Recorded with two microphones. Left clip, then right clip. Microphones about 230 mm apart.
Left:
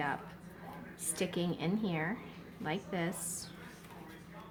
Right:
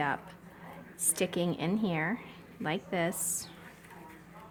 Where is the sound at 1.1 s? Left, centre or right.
Right.